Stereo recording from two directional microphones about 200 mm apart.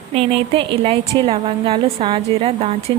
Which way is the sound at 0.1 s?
30° right (ahead or behind).